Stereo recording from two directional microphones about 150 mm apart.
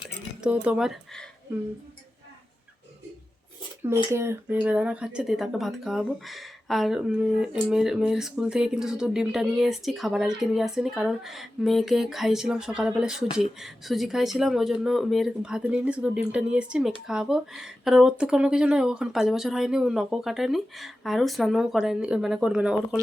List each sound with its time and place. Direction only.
0.0 s chink: 5° right (ahead or behind)
3.8 s speech: 15° right (ahead or behind)